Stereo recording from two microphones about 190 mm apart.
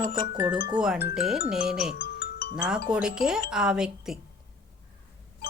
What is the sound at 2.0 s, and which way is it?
Chime, 55° left (ahead or behind).